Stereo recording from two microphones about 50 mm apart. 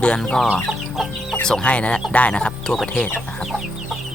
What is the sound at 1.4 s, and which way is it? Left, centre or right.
Speech, centre.